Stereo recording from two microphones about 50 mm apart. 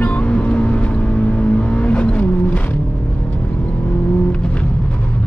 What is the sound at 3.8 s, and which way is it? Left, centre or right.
Vehicle, left.